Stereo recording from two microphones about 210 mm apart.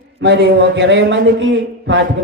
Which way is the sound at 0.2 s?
55° right (ahead or behind).